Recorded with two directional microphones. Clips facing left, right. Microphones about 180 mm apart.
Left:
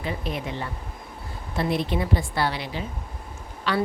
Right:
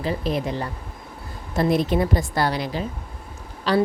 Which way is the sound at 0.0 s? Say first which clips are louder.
Right 5 dB; 35° right (ahead or behind).